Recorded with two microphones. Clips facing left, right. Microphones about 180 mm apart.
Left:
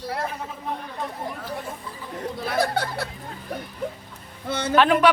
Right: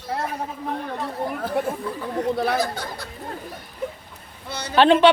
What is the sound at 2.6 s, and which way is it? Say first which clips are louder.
Speech: left 3 dB; 65° left (ahead or behind).